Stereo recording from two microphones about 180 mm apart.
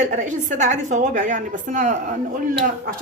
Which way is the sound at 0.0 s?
45° right (ahead or behind).